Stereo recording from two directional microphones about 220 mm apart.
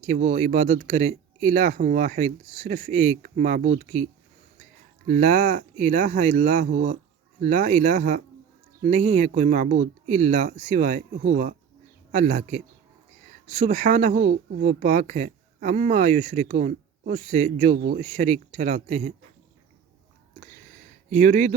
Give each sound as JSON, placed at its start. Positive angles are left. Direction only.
{"t": 0.0, "sound": "speech", "side_deg": -30}
{"t": 21.1, "sound": "speech", "side_deg": -35}